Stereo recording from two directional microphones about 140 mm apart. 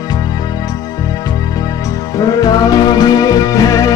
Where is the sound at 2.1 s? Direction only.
25° left (ahead or behind).